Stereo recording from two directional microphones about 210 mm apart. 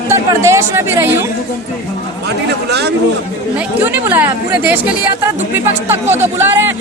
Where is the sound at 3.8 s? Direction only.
10° right (ahead or behind).